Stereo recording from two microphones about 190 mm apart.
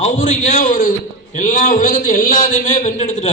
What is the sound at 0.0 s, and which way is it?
A man's voice, 40° left (ahead or behind).